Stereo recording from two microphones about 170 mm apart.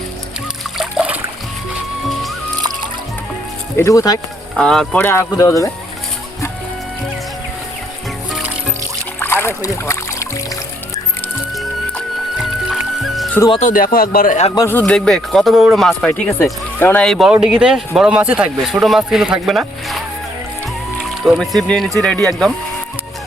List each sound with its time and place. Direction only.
0.8 s a sound: 5° right (ahead or behind)
3.8 s speech: 20° left (ahead or behind)
4.5 s speech: 5° left (ahead or behind); by 5.7 s 20° left (ahead or behind)
9.2 s music: 15° left (ahead or behind)
11.5 s music: centre (ahead or behind)
13.6 s speech: 50° left (ahead or behind)
14.7 s speech: 10° left (ahead or behind)
21.0 s speech: centre (ahead or behind)